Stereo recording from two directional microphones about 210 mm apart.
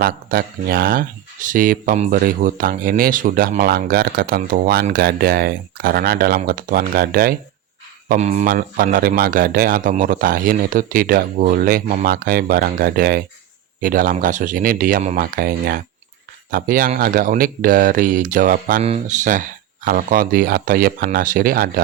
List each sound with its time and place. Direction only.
0.0 s speech: 45° right (ahead or behind)
8.0 s speech: 35° right (ahead or behind)